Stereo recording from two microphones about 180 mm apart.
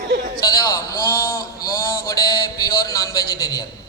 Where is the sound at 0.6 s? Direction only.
20° left (ahead or behind).